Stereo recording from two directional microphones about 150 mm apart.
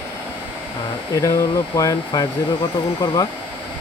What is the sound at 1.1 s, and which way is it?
Speech, 20° left (ahead or behind).